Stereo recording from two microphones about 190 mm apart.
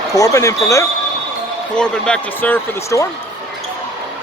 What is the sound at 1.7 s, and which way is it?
Speech, 5° left (ahead or behind).